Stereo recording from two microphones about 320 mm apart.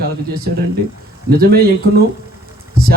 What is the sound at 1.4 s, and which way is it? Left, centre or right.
Speech, right.